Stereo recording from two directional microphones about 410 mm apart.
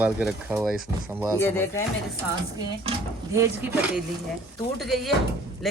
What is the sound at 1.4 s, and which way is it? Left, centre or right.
Speech, centre.